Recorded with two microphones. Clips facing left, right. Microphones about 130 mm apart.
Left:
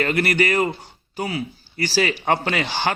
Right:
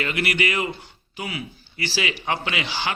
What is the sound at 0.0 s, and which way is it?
Speech, 40° left (ahead or behind).